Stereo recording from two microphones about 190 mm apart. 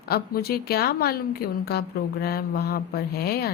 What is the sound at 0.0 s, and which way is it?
Speech, 55° left (ahead or behind).